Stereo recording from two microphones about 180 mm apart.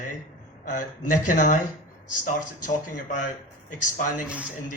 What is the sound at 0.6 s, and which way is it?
A man's voice, 45° left (ahead or behind).